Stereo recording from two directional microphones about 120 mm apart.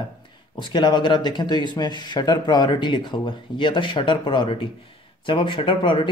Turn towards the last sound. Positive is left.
turn(degrees=45)  # may be behind; listen again after turning